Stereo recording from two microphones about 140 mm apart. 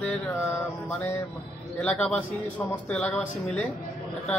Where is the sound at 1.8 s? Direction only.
5° left (ahead or behind).